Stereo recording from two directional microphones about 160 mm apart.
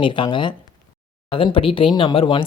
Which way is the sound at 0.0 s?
30° left (ahead or behind).